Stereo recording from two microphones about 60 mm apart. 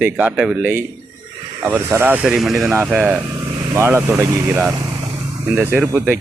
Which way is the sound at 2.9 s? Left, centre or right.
Centre.